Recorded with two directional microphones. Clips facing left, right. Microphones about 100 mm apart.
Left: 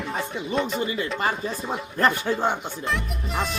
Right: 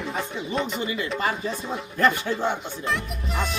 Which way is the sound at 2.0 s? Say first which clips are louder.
Even; 40° left (ahead or behind).